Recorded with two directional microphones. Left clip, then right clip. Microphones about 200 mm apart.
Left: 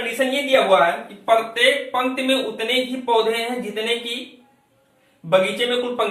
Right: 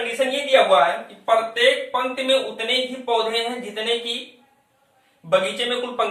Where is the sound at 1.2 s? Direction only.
10° right (ahead or behind).